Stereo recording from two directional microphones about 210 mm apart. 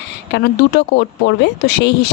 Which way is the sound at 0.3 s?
55° left (ahead or behind).